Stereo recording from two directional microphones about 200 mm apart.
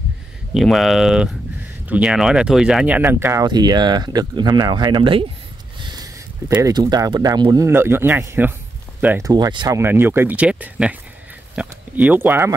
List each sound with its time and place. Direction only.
0.6 s speech: centre (ahead or behind); by 5.2 s 25° right (ahead or behind)
5.8 s a sound: 20° right (ahead or behind)
6.5 s speech: 20° right (ahead or behind)